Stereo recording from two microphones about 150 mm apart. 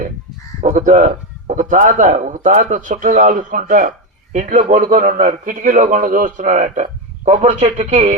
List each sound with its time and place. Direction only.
0.6 s speech: 55° right (ahead or behind)